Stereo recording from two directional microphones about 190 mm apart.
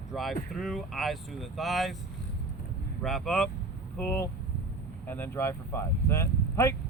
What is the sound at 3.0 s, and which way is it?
Speech, centre (ahead or behind).